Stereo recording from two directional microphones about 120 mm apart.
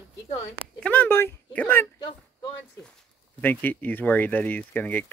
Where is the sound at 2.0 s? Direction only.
40° left (ahead or behind).